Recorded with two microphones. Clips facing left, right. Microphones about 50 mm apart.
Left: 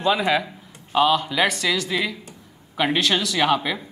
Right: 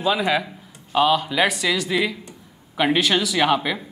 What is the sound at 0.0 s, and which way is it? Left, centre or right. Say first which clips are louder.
A man's voice: even; centre.